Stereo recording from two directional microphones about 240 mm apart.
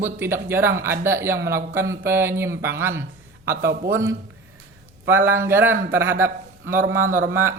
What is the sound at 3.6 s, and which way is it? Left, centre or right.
Speech, right.